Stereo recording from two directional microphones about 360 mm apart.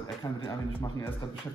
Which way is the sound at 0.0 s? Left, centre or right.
Centre.